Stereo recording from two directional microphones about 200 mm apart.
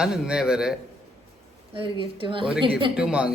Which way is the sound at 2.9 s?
5° right (ahead or behind).